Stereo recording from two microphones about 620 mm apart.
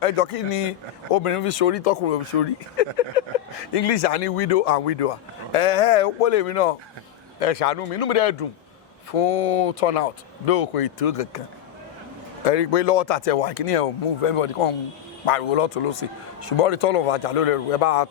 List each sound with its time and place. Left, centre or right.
0.0 s speech: left
12.5 s speech: left